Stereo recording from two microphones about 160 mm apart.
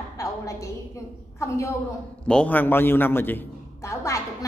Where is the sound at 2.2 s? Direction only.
10° left (ahead or behind).